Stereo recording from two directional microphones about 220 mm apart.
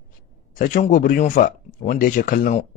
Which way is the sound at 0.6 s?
35° left (ahead or behind).